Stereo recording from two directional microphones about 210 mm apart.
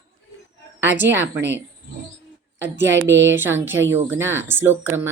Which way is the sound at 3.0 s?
10° right (ahead or behind).